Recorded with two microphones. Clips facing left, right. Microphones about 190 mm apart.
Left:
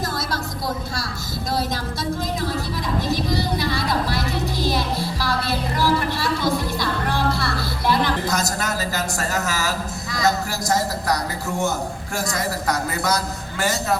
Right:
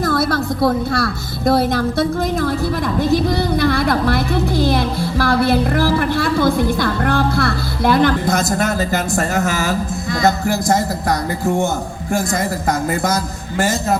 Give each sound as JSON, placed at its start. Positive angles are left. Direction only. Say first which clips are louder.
{"t": 0.0, "sound": "a woman's voice", "louder": "right 9 dB", "side_deg": -60}